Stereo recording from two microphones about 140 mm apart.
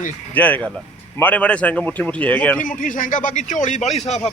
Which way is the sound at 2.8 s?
75° left (ahead or behind).